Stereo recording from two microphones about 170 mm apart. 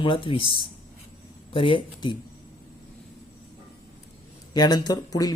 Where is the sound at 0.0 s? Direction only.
30° left (ahead or behind).